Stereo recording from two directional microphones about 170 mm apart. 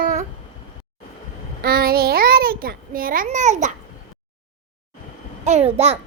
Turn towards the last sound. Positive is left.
turn(degrees=-40)  # may be behind; listen again after turning